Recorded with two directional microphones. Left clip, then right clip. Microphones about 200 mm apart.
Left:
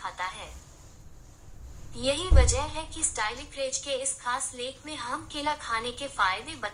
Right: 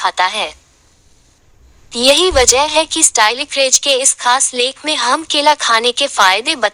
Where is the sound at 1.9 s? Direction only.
50° right (ahead or behind).